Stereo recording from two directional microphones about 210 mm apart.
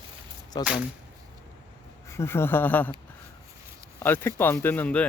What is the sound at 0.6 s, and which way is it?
Speech, 5° right (ahead or behind).